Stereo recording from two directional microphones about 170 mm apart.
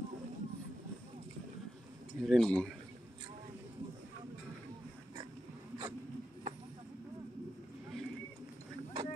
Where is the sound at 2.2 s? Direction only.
Centre (ahead or behind).